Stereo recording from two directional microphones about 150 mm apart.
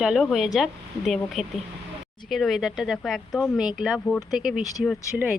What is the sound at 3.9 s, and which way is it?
Speech, 5° left (ahead or behind).